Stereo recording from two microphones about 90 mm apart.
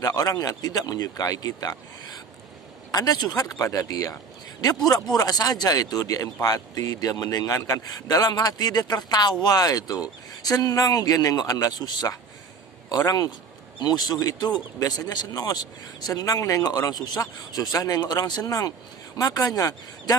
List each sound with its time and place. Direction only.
0.0 s a man's voice: 40° left (ahead or behind)